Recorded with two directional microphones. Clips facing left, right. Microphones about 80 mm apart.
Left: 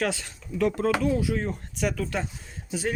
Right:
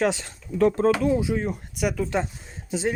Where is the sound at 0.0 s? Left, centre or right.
Right.